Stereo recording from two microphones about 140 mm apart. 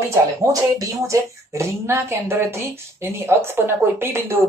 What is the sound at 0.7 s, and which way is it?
Speech, 25° right (ahead or behind).